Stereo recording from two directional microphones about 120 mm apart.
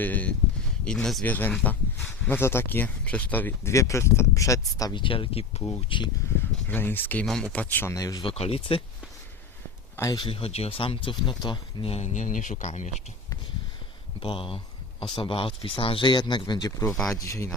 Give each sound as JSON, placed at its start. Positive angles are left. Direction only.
{"t": 0.0, "sound": "speech", "side_deg": 15}
{"t": 4.9, "sound": "speech", "side_deg": 45}
{"t": 5.9, "sound": "speech", "side_deg": 40}
{"t": 6.7, "sound": "speech", "side_deg": 15}
{"t": 7.9, "sound": "speech", "side_deg": 30}
{"t": 8.2, "sound": "speech", "side_deg": 50}
{"t": 10.2, "sound": "speech", "side_deg": 50}
{"t": 14.2, "sound": "speech", "side_deg": 45}